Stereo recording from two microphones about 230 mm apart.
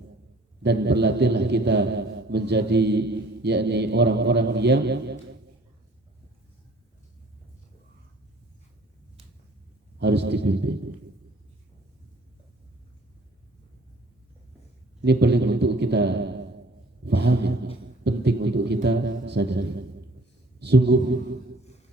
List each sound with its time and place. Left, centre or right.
0.6 s a man's voice: right
10.0 s a man's voice: right
15.0 s a man's voice: right